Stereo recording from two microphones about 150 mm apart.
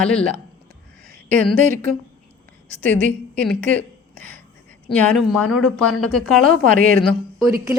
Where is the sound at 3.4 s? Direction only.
10° left (ahead or behind).